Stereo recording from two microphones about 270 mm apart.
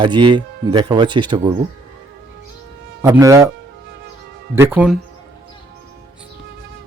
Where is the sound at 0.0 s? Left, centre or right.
Centre.